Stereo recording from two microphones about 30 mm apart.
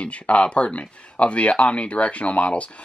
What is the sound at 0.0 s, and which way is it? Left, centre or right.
Speech, left.